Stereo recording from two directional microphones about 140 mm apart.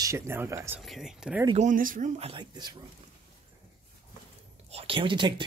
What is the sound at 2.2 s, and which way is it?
Speech, 40° right (ahead or behind).